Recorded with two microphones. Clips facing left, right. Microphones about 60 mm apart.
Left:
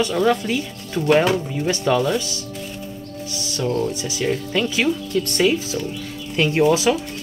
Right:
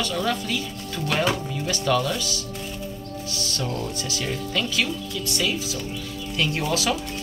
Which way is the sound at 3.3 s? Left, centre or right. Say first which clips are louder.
Left 6 dB; centre.